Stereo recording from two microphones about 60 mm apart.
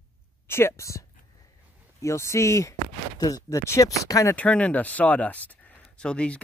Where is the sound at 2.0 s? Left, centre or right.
Left.